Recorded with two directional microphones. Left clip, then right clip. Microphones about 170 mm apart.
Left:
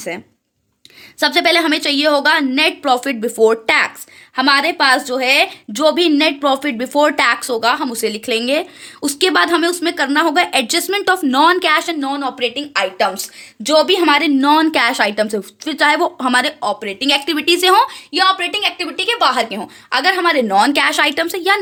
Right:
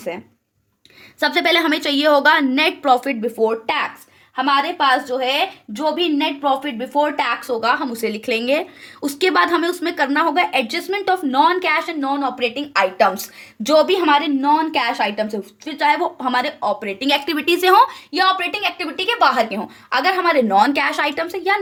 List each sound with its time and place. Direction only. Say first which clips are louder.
1.2 s a woman's voice: left 3 dB; 15° left (ahead or behind); by 7.3 s 70° left (ahead or behind)
7.3 s a woman's voice: left 5 dB; 40° left (ahead or behind)
7.6 s speech: left 3 dB; 25° left (ahead or behind)
12.0 s a woman's voice: left 1 dB; 15° left (ahead or behind)
13.8 s speech: left 3 dB; 20° left (ahead or behind)
14.1 s a woman's voice: left 2 dB; 40° left (ahead or behind)
14.3 s a woman's voice: left 4 dB; 55° left (ahead or behind); by 16.6 s 40° left (ahead or behind)
16.6 s speech: left 2 dB; 20° left (ahead or behind); by 21.6 s 35° left (ahead or behind)